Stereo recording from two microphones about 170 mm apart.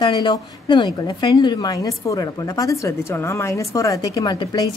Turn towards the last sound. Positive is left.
turn(degrees=25)  # may be behind; listen again after turning